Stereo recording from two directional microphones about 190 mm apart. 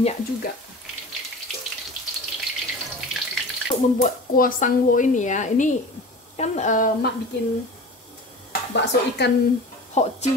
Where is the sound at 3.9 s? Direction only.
45° left (ahead or behind).